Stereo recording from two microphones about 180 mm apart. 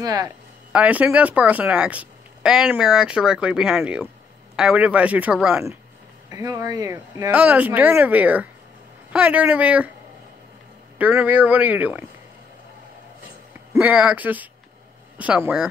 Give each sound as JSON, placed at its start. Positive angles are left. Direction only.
{"t": 0.0, "sound": "speech", "side_deg": -20}
{"t": 0.7, "sound": "speech", "side_deg": -5}
{"t": 6.3, "sound": "speech", "side_deg": -20}
{"t": 7.2, "sound": "speech", "side_deg": -10}
{"t": 11.0, "sound": "speech", "side_deg": -10}
{"t": 13.7, "sound": "speech", "side_deg": -5}